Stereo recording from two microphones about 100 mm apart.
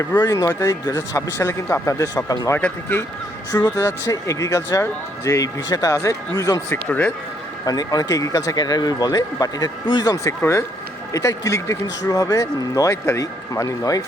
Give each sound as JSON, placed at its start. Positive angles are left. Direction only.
{"t": 0.2, "sound": "speech", "side_deg": 45}
{"t": 0.4, "sound": "speech", "side_deg": 35}
{"t": 2.6, "sound": "speech", "side_deg": 15}
{"t": 3.5, "sound": "speech", "side_deg": 35}
{"t": 6.7, "sound": "speech", "side_deg": 20}
{"t": 7.6, "sound": "speech", "side_deg": 40}